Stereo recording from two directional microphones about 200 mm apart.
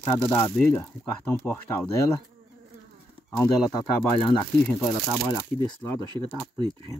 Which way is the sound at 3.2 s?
15° left (ahead or behind).